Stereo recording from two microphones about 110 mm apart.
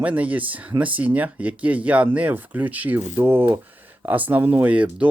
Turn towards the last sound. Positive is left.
turn(degrees=-10)  # may be behind; listen again after turning